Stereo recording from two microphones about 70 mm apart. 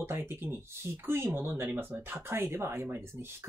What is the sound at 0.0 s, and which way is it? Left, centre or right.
Speech, right.